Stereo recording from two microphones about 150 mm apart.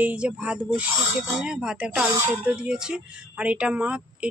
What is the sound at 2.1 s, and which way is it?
Speech, 15° right (ahead or behind).